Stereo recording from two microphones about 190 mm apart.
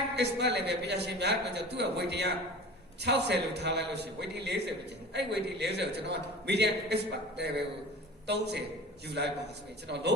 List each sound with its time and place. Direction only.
0.2 s a man's voice: 65° right (ahead or behind)